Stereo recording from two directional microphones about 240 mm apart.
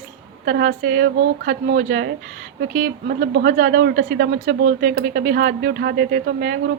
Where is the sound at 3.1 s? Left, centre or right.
Right.